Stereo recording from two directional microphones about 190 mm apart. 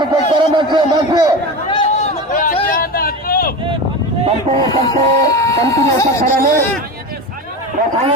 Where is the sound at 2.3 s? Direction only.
45° left (ahead or behind).